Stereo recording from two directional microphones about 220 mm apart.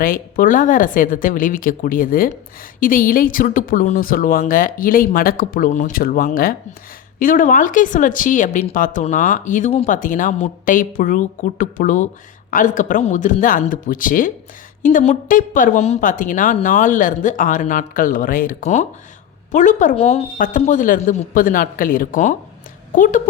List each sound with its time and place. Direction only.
0.0 s a woman's voice: 40° left (ahead or behind)